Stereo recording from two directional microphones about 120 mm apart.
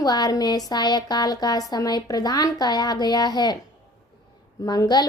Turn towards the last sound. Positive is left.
turn(degrees=35)  # may be behind; listen again after turning